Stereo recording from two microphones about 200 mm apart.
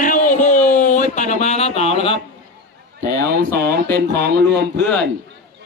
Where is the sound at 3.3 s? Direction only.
50° right (ahead or behind).